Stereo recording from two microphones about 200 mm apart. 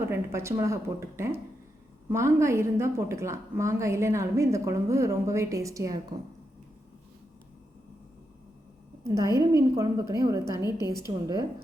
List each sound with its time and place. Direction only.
0.0 s a woman's voice: 10° right (ahead or behind)
9.0 s a woman's voice: 15° right (ahead or behind)
10.6 s a woman's voice: 20° left (ahead or behind)
11.0 s a woman's voice: 20° right (ahead or behind)